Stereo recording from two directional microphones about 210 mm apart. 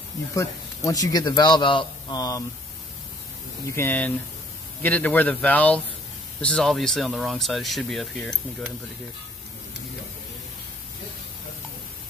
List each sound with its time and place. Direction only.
0.3 s a man's voice: 15° left (ahead or behind)
3.7 s speech: 10° left (ahead or behind)